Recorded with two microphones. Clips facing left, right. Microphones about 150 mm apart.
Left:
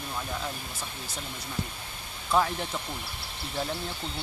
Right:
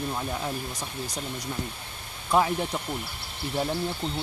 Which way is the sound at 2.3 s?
10° right (ahead or behind).